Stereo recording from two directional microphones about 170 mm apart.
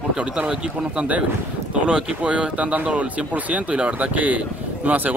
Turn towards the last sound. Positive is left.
turn(degrees=-10)  # may be behind; listen again after turning